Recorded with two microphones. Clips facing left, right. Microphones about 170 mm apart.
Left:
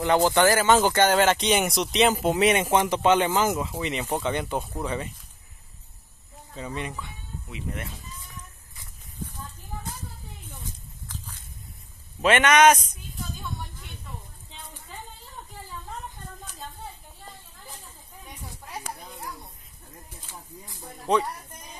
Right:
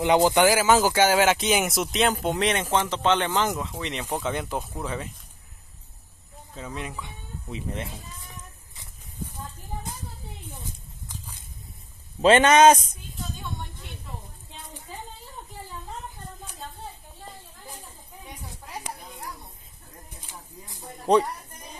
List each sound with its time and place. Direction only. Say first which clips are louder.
0.0 s speech: right 1 dB; 15° right (ahead or behind); by 5.1 s centre (ahead or behind)
6.5 s speech: left 2 dB; centre (ahead or behind)
7.4 s speech: right 2 dB; 30° right (ahead or behind)
8.7 s a sound: even; 15° right (ahead or behind)
11.1 s walk: left 1 dB; 15° right (ahead or behind)
12.2 s a man's voice: right 3 dB; 30° right (ahead or behind)
18.2 s a sound: even; 20° right (ahead or behind)
20.2 s a sound: left 1 dB; 20° right (ahead or behind)
21.1 s speech: right 4 dB; 35° right (ahead or behind)